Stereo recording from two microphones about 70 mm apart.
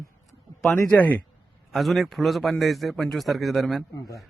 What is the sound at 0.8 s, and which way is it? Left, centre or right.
Speech, left.